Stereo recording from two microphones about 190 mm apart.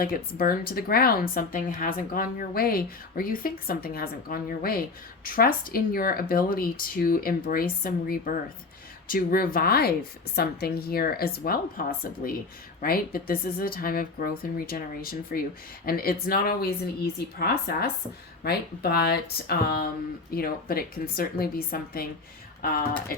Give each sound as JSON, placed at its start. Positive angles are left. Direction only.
{"t": 0.0, "sound": "a woman's voice", "side_deg": 50}